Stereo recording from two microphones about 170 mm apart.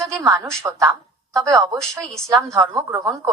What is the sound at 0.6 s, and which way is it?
A woman's voice, 20° right (ahead or behind).